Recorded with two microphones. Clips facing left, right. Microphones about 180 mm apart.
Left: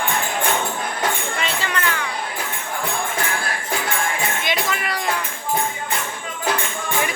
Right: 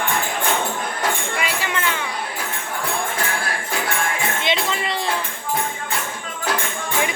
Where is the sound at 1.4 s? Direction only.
15° right (ahead or behind).